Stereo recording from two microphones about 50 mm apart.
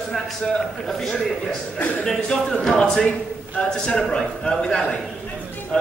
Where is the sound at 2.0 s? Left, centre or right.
Centre.